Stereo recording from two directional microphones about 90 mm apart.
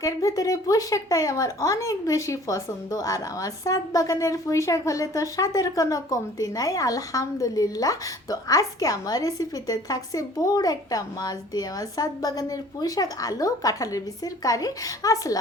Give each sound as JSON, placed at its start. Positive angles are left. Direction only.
{"t": 0.0, "sound": "speech", "side_deg": 40}